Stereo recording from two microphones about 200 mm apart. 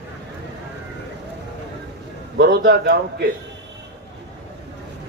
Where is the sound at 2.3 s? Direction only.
55° right (ahead or behind).